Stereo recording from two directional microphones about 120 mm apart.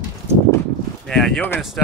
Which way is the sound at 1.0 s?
5° left (ahead or behind).